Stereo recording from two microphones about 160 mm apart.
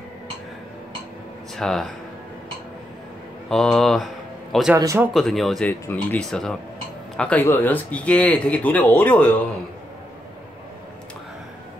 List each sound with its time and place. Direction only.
1.6 s speech: centre (ahead or behind)
3.4 s speech: 5° left (ahead or behind)
4.7 s speech: 15° right (ahead or behind)
5.1 s speech: centre (ahead or behind)
5.7 s speech: 10° left (ahead or behind)